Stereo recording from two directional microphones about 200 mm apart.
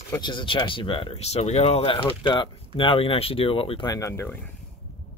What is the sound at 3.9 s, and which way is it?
Speech, 15° left (ahead or behind).